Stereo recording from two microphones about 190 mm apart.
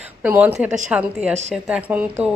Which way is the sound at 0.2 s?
10° right (ahead or behind).